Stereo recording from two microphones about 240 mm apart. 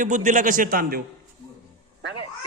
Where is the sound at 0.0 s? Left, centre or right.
Right.